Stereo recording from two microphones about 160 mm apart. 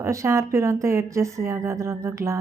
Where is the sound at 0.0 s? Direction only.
20° right (ahead or behind).